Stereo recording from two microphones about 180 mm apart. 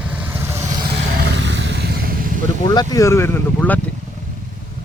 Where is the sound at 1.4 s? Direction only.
85° right.